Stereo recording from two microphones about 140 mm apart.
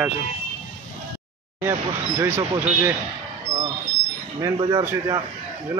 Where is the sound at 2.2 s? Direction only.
15° right (ahead or behind).